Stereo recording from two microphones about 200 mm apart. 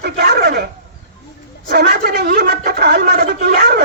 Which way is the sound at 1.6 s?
55° right (ahead or behind).